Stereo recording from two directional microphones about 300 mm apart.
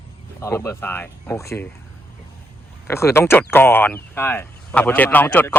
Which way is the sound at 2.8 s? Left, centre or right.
Centre.